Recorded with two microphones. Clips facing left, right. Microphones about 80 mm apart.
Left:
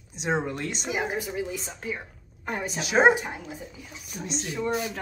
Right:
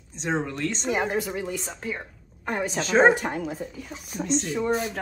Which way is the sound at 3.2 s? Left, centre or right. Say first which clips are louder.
Right 6 dB; right.